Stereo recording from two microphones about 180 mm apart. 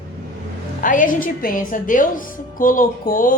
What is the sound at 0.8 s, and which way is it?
A woman's voice, 50° left (ahead or behind).